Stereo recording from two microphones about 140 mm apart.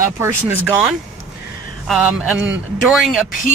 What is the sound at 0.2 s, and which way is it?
Speech, 15° right (ahead or behind).